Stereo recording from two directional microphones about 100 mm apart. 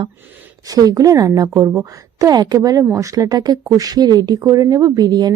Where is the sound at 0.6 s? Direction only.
40° right (ahead or behind).